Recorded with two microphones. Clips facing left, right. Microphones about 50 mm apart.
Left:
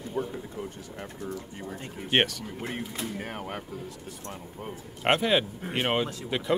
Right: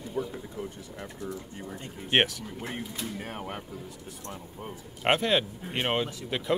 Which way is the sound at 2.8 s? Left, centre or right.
Left.